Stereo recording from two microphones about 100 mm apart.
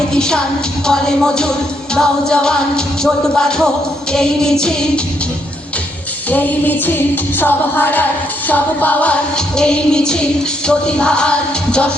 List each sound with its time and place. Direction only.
0.1 s music: 5° left (ahead or behind)
6.3 s music: 15° left (ahead or behind)